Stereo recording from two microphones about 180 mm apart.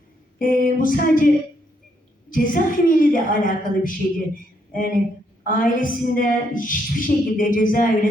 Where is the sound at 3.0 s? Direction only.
50° left (ahead or behind).